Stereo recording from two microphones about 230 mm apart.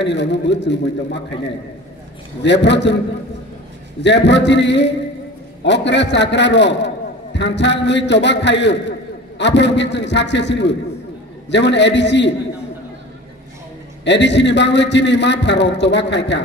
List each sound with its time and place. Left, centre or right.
0.0 s a man's voice: left
2.4 s a man's voice: left
4.0 s a man's voice: left
14.0 s a man's voice: left